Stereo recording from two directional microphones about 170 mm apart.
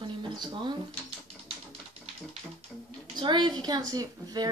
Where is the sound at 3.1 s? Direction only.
25° right (ahead or behind).